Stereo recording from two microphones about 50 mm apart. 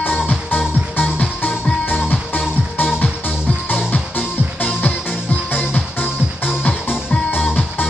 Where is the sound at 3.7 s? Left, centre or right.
Left.